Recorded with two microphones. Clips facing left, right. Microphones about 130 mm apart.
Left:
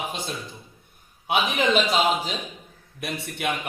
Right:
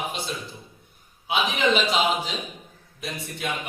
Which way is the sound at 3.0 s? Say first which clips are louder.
Left 3 dB; 60° left (ahead or behind).